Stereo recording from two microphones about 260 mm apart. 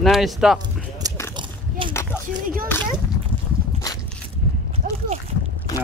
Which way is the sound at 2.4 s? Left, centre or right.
Right.